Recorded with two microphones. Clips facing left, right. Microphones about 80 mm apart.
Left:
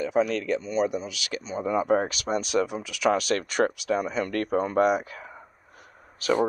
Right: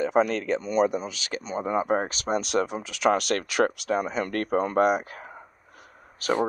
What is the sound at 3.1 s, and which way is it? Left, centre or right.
Speech, right.